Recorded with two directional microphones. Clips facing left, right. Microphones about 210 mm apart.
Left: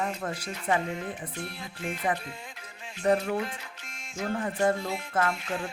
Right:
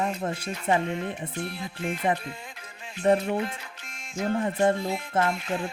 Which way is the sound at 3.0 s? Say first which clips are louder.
Right 3 dB; 25° right (ahead or behind).